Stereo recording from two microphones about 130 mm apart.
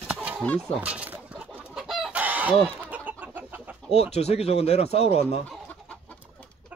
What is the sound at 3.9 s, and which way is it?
Speech, 55° left (ahead or behind).